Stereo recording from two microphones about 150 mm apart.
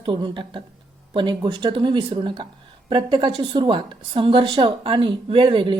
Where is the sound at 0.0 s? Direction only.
35° right (ahead or behind).